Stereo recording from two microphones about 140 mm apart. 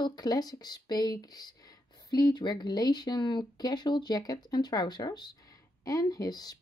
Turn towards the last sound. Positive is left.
turn(degrees=25)  # may be behind; listen again after turning